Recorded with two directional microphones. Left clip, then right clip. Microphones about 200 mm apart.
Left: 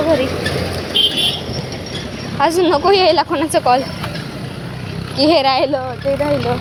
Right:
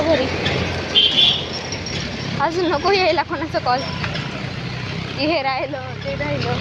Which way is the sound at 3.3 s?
30° left (ahead or behind).